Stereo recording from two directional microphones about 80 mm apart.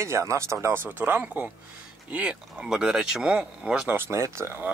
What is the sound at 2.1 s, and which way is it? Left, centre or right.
Speech, centre.